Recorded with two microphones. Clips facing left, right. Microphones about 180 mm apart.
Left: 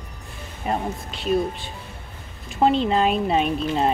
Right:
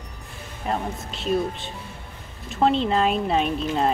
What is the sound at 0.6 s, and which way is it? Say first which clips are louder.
Speech: left 1 dB; 5° left (ahead or behind).